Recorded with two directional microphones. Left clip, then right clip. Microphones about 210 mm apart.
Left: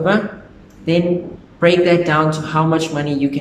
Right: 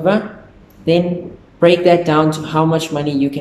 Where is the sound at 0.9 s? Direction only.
15° right (ahead or behind).